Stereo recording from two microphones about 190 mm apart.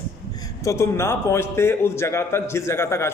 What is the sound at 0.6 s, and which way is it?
A man's voice, 15° left (ahead or behind).